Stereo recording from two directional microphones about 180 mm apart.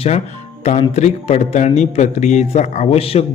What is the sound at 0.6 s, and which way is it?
A man's voice, 40° left (ahead or behind).